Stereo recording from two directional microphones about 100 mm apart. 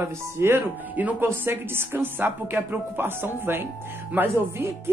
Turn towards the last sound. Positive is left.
turn(degrees=-20)  # may be behind; listen again after turning